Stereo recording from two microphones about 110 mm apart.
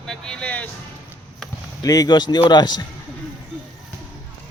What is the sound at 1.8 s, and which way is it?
Speech, 35° left (ahead or behind).